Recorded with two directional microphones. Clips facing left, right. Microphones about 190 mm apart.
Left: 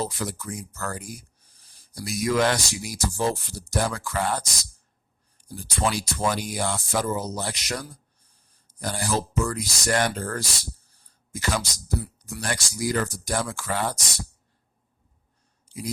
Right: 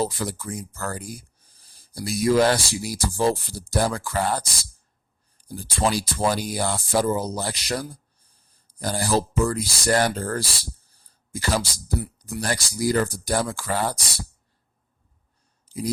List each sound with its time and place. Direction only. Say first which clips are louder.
0.0 s speech: right 4 dB; 30° right (ahead or behind)
5.5 s speech: right 3 dB; 35° right (ahead or behind)
15.7 s a sound: right 5 dB; 35° right (ahead or behind)